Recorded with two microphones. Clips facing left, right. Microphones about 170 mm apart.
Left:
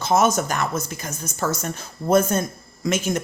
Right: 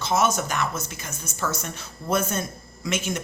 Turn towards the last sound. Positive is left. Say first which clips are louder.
# left 5 dB
turn(degrees=40)  # may be behind; listen again after turning